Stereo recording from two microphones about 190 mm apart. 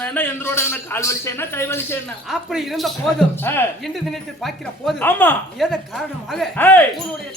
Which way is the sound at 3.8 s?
Centre (ahead or behind).